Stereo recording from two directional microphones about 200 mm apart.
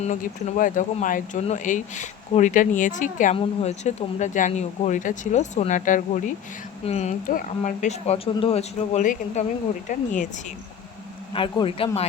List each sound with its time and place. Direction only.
0.0 s speech: 40° left (ahead or behind)
11.3 s speech: 25° left (ahead or behind)